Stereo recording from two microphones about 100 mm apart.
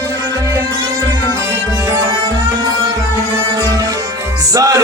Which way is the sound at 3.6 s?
40° right (ahead or behind).